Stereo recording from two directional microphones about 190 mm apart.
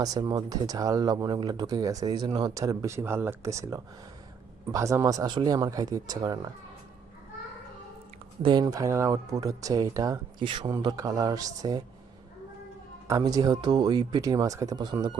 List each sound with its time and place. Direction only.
0.0 s speech: 20° right (ahead or behind)
8.4 s speech: 25° right (ahead or behind)
13.1 s speech: 20° right (ahead or behind)